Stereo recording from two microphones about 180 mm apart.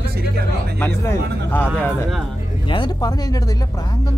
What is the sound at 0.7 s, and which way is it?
Speech, 15° left (ahead or behind).